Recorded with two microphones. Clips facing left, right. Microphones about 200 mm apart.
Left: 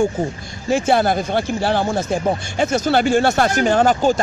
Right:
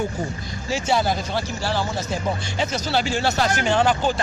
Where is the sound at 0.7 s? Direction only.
55° left (ahead or behind).